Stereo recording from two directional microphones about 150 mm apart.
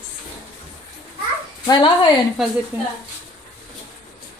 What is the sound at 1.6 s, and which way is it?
Speech, 30° left (ahead or behind).